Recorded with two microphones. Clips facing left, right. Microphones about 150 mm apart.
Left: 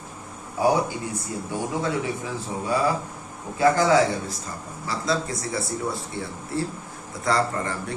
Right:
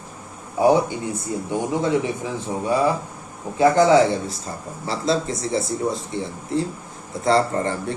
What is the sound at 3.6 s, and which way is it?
Speech, 25° right (ahead or behind).